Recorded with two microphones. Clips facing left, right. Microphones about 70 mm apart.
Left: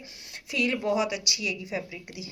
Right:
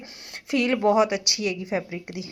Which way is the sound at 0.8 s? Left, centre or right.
Right.